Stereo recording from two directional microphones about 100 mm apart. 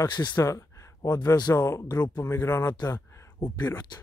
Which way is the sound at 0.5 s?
30° left (ahead or behind).